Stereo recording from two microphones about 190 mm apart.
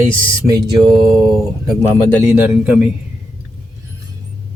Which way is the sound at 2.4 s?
5° right (ahead or behind).